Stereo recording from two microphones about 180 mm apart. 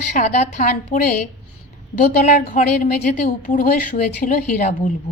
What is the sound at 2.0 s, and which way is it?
A woman's voice, 50° left (ahead or behind).